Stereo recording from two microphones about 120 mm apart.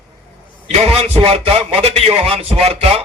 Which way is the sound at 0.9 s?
60° right (ahead or behind).